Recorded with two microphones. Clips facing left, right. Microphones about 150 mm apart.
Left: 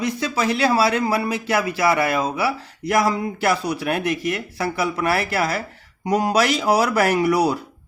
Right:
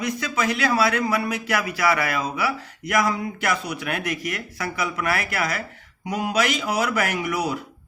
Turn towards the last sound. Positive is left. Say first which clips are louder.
# left 7 dB
turn(degrees=35)  # may be behind; listen again after turning